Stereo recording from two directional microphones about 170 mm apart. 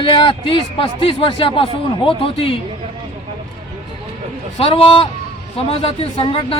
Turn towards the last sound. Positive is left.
turn(degrees=30)  # may be behind; listen again after turning